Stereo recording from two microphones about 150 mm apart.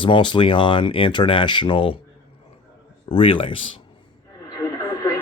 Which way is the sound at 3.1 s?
35° left (ahead or behind).